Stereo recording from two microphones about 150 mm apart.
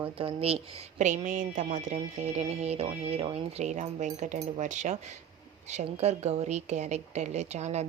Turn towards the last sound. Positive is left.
turn(degrees=-45)  # may be behind; listen again after turning